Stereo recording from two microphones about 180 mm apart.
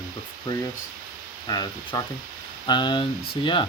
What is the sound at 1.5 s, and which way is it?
Speech, 20° left (ahead or behind).